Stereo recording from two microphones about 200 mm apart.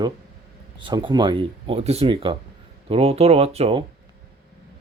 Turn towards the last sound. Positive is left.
turn(degrees=-30)  # may be behind; listen again after turning